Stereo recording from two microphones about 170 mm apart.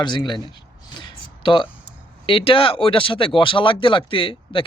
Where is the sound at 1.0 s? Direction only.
30° left (ahead or behind).